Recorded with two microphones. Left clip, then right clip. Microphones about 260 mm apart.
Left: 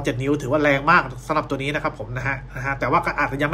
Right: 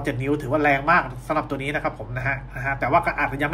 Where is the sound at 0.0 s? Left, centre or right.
Centre.